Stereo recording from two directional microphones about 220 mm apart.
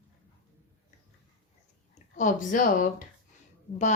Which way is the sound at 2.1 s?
35° left (ahead or behind).